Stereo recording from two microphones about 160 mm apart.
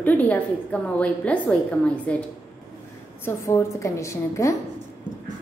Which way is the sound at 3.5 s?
20° left (ahead or behind).